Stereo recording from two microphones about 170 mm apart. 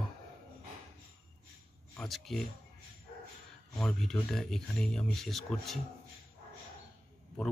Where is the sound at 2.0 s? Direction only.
Centre (ahead or behind).